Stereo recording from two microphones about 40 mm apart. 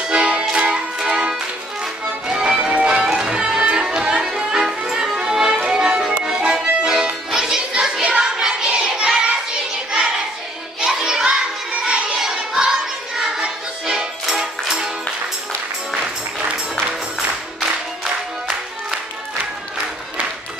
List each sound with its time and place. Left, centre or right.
0.0 s music: right
2.2 s music: right
7.7 s a sound: right
10.8 s music: centre